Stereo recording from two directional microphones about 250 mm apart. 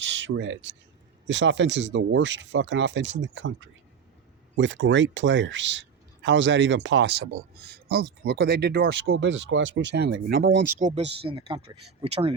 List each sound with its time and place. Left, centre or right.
0.0 s speech: right